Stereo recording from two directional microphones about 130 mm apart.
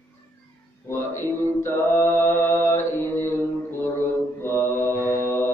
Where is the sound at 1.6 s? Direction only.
20° left (ahead or behind).